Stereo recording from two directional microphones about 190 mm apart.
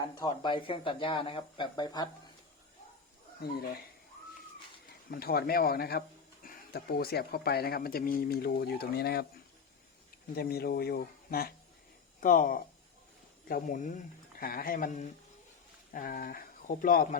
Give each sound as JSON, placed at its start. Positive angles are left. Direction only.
{"t": 0.2, "sound": "speech", "side_deg": 25}
{"t": 3.4, "sound": "a man's voice", "side_deg": 55}
{"t": 5.1, "sound": "speech", "side_deg": 55}
{"t": 10.3, "sound": "a man's voice", "side_deg": 55}